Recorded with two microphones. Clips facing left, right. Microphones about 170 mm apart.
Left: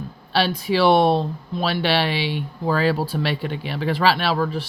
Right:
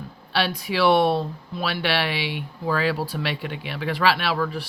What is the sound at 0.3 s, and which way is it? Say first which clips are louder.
Speech: left 4 dB; 30° left (ahead or behind).